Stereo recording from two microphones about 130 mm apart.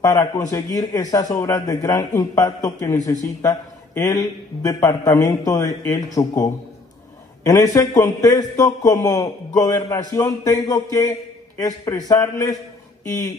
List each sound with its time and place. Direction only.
0.0 s a man's voice: 30° left (ahead or behind)